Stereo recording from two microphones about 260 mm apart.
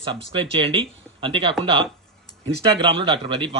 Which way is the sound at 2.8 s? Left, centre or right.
Centre.